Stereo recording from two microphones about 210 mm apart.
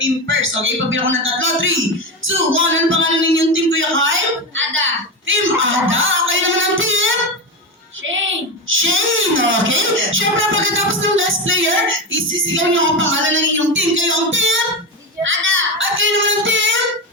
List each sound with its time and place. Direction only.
0.0 s speech: 65° right (ahead or behind)
4.7 s a sound: 70° right (ahead or behind)
8.0 s speech: 65° right (ahead or behind)